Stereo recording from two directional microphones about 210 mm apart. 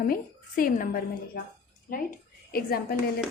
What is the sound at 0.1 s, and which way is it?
A woman's voice, 40° left (ahead or behind).